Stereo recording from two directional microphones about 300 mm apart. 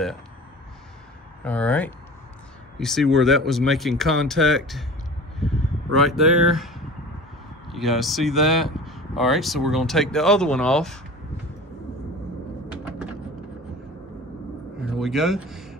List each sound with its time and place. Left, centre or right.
1.4 s speech: centre
5.9 s speech: centre
14.8 s speech: centre